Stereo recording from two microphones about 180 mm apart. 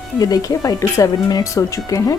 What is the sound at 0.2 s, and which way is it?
Speech, 20° left (ahead or behind).